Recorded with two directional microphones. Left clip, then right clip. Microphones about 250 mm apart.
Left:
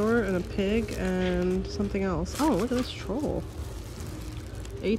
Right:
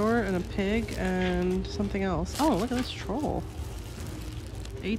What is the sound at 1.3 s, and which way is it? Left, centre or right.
Speech, centre.